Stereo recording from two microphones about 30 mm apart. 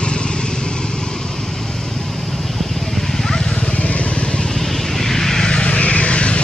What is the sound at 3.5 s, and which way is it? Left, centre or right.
Vehicle, left.